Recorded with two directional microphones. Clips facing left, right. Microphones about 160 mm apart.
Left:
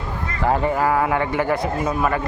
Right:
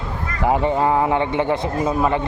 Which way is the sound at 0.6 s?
25° right (ahead or behind).